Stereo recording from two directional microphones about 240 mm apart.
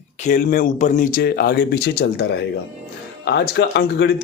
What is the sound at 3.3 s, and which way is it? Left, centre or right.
Speech, left.